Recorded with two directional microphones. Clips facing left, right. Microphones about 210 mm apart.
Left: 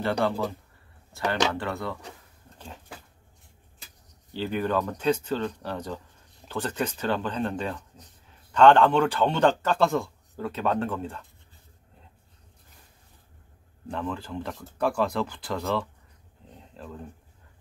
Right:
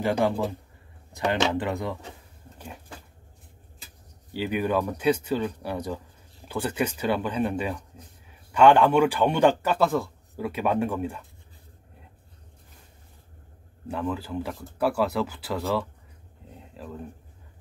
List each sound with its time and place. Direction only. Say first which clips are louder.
1.1 s a man's voice: right 2 dB; 20° right (ahead or behind)
4.3 s a man's voice: right 1 dB; 10° right (ahead or behind)
13.8 s a man's voice: right 3 dB; 5° right (ahead or behind)
16.5 s a sound: right 2 dB; 5° right (ahead or behind)